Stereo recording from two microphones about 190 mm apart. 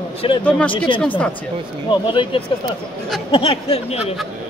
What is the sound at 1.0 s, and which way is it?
Speech, 5° left (ahead or behind).